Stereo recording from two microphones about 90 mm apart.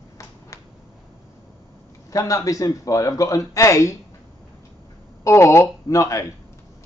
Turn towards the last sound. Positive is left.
turn(degrees=35)  # may be behind; listen again after turning